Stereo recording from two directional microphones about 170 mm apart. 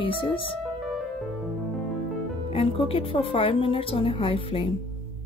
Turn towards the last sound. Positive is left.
turn(degrees=35)  # may be behind; listen again after turning